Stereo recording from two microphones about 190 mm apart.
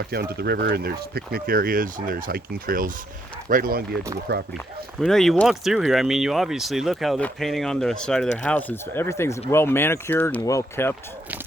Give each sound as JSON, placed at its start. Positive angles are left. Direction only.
{"t": 0.0, "sound": "speech", "side_deg": -55}
{"t": 4.9, "sound": "speech", "side_deg": 0}